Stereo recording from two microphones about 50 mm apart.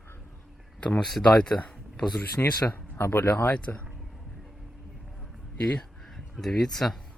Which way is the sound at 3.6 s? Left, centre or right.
Left.